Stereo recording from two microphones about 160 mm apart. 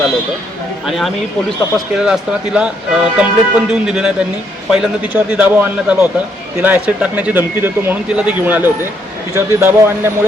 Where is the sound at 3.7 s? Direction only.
5° right (ahead or behind).